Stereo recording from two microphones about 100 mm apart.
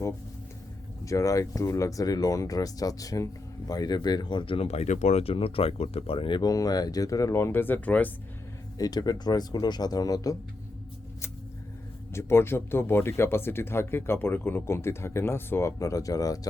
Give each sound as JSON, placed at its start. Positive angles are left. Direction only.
{"t": 1.0, "sound": "speech", "side_deg": 30}
{"t": 6.5, "sound": "speech", "side_deg": 40}
{"t": 8.8, "sound": "speech", "side_deg": 40}
{"t": 12.1, "sound": "speech", "side_deg": 25}